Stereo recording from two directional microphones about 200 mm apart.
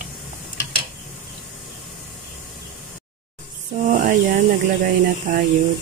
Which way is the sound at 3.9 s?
40° right (ahead or behind).